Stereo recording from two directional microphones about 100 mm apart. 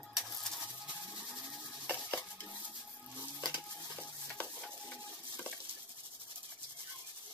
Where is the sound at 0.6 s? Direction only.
10° right (ahead or behind).